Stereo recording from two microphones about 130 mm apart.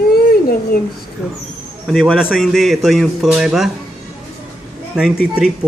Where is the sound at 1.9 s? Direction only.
Centre (ahead or behind).